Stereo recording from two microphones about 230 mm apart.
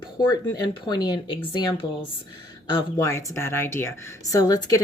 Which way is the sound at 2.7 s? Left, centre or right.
Centre.